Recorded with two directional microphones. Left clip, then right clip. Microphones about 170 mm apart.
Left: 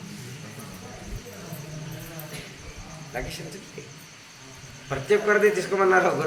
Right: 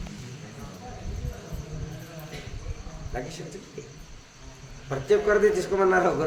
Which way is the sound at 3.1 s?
35° right (ahead or behind).